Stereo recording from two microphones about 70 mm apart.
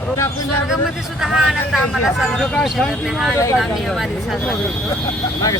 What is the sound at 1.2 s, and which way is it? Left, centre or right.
Speech, centre.